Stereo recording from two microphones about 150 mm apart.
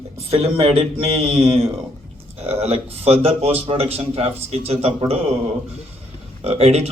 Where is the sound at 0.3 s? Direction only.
40° right (ahead or behind).